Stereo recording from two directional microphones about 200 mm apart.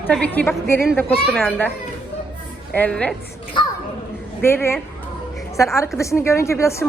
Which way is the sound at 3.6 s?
25° left (ahead or behind).